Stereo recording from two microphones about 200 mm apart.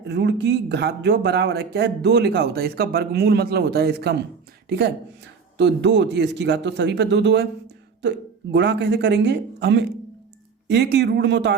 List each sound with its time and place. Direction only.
0.0 s speech: 60° right (ahead or behind)
5.5 s speech: 60° right (ahead or behind)
8.5 s speech: 55° right (ahead or behind)